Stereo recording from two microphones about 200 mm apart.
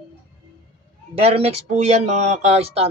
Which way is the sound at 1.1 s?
30° right (ahead or behind).